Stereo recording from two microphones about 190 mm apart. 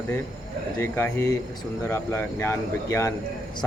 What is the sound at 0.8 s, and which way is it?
Speech, 10° left (ahead or behind).